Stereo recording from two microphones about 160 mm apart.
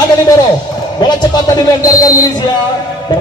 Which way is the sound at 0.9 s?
25° left (ahead or behind).